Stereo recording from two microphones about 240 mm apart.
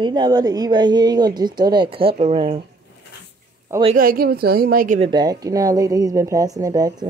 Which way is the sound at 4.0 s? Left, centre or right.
Right.